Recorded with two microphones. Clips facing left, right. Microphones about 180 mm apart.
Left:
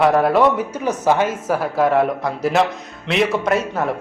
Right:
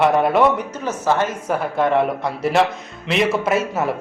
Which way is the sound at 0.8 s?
15° left (ahead or behind).